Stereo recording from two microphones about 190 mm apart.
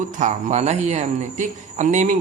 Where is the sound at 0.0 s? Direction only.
40° right (ahead or behind).